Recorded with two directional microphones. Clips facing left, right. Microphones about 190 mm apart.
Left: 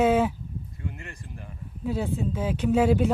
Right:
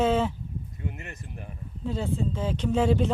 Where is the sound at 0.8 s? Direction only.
20° right (ahead or behind).